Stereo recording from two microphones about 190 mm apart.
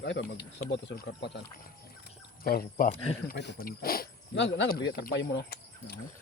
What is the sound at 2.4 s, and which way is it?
Speech, 50° left (ahead or behind).